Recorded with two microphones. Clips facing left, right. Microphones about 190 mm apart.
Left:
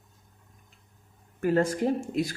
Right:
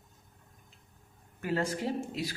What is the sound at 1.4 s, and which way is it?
Speech, 50° left (ahead or behind).